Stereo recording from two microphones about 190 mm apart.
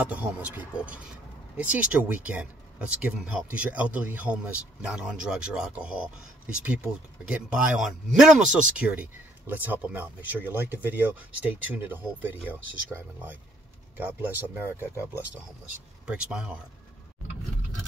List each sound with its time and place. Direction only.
0.0 s speech: 5° right (ahead or behind)